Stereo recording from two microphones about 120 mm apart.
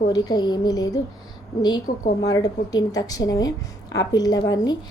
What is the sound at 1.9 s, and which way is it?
Speech, 90° left.